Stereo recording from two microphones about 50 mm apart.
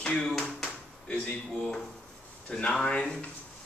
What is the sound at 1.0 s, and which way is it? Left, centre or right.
Speech, left.